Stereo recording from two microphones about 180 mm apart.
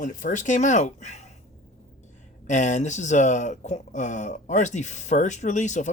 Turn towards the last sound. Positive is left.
turn(degrees=40)  # may be behind; listen again after turning